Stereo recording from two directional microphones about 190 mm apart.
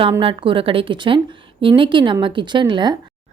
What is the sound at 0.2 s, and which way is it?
A woman's voice, 25° right (ahead or behind).